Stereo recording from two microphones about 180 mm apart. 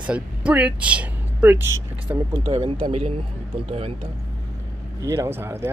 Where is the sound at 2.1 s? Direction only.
25° right (ahead or behind).